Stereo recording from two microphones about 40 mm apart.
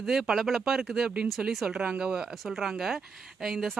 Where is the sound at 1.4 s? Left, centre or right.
Right.